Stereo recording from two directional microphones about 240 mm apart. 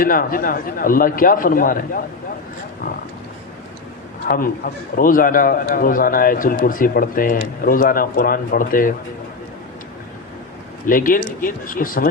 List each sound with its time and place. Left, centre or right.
0.0 s a man's voice: left
4.2 s a man's voice: left
10.8 s a man's voice: left